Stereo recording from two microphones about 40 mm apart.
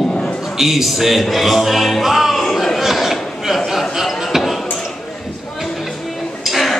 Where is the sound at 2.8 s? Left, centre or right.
Centre.